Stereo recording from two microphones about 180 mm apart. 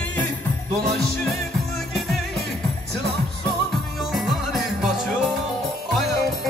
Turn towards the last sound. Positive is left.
turn(degrees=0)  # may be behind; listen again after turning